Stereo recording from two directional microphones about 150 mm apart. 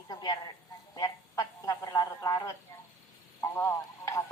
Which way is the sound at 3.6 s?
20° left (ahead or behind).